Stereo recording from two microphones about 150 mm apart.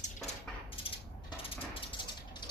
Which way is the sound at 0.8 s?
35° left (ahead or behind).